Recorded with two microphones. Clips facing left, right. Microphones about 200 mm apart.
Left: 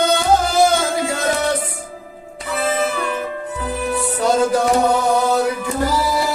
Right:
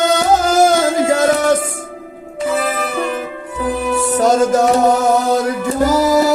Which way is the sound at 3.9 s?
45° right (ahead or behind).